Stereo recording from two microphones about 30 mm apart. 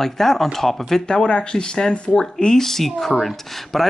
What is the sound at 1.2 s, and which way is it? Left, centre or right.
Speech, left.